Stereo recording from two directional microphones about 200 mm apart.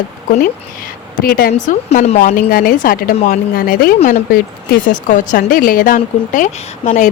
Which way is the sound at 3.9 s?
30° left (ahead or behind).